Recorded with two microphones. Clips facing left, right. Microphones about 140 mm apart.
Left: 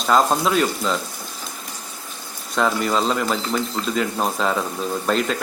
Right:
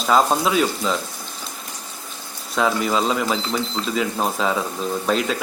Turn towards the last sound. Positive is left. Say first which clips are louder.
# even
turn(degrees=0)  # may be behind; listen again after turning